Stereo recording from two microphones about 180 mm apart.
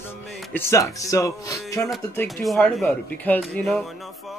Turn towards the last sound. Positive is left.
turn(degrees=5)  # may be behind; listen again after turning